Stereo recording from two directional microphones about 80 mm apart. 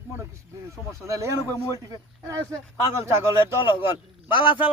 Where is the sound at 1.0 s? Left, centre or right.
Right.